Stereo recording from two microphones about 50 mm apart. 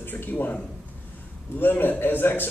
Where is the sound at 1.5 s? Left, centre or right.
Left.